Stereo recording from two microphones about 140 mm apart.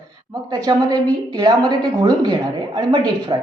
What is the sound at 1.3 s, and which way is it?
A man's voice, 30° right (ahead or behind).